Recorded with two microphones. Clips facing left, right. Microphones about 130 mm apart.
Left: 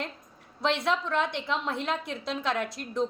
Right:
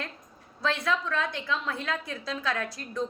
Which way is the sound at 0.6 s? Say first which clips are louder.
Left 1 dB; 25° left (ahead or behind).